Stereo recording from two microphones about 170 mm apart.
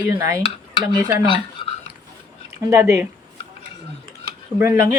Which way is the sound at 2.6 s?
20° right (ahead or behind).